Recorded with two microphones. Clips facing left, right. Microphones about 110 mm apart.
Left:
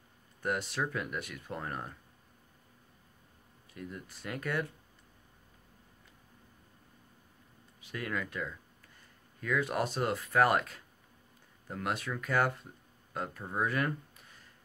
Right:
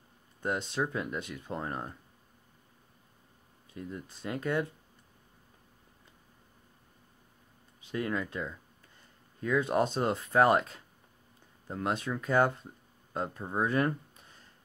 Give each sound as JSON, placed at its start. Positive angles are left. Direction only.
{"t": 0.4, "sound": "speech", "side_deg": -25}
{"t": 3.7, "sound": "speech", "side_deg": -25}
{"t": 7.8, "sound": "speech", "side_deg": -25}